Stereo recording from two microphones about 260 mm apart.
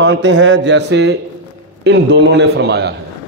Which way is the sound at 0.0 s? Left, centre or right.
Right.